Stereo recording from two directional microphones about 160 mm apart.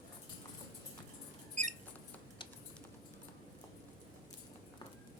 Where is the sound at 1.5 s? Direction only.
50° right (ahead or behind).